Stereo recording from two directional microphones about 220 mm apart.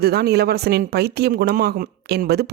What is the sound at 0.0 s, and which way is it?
A woman's voice, 45° right (ahead or behind).